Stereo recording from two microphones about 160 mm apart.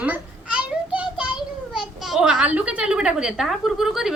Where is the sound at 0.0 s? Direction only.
10° right (ahead or behind).